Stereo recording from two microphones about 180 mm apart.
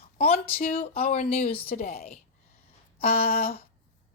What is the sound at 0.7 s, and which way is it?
Speech, 35° left (ahead or behind).